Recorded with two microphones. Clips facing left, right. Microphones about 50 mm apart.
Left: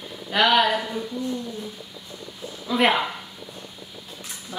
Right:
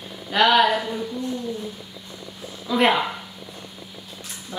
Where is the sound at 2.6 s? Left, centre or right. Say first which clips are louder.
Right 1 dB; centre.